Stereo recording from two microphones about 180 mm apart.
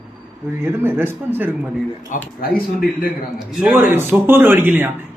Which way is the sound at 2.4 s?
55° left (ahead or behind).